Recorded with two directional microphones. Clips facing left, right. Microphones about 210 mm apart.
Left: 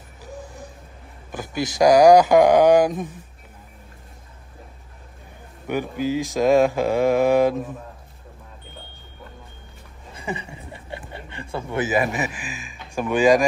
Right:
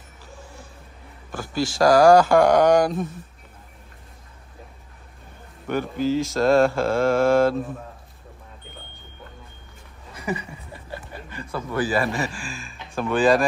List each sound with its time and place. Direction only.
1.3 s mantra: 20° left (ahead or behind)
5.7 s mantra: 15° left (ahead or behind)
10.1 s a sound: 25° left (ahead or behind)